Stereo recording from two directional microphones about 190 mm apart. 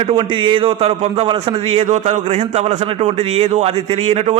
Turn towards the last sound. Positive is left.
turn(degrees=-30)  # may be behind; listen again after turning